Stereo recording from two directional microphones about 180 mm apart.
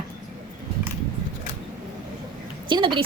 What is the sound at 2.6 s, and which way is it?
Speech, 25° right (ahead or behind).